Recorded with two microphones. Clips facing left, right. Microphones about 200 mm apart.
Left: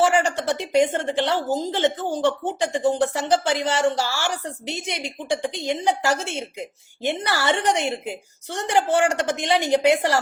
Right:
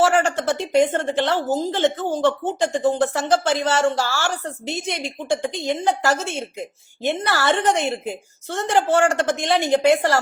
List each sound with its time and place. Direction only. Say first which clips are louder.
0.1 s a woman's voice: right 2 dB; 50° right (ahead or behind)
0.3 s speech: right 2 dB; 15° left (ahead or behind)